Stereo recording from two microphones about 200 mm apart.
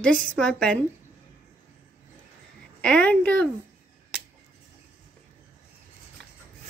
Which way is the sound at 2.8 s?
5° left (ahead or behind).